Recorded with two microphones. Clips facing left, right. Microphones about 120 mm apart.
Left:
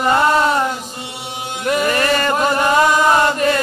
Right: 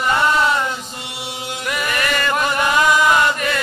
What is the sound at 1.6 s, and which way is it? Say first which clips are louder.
Chant: left 7 dB; 35° left (ahead or behind).